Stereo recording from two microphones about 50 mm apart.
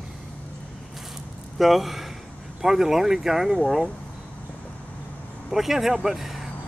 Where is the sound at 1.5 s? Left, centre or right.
Centre.